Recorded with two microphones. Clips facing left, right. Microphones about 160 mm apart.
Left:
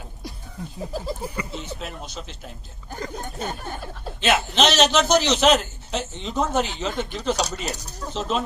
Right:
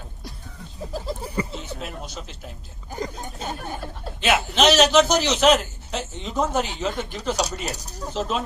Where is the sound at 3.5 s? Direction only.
5° right (ahead or behind).